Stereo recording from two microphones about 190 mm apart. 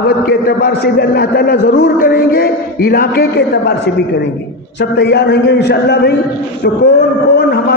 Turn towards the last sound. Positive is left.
turn(degrees=55)  # may be behind; listen again after turning